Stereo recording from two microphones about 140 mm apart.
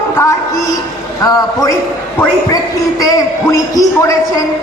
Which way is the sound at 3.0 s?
25° left (ahead or behind).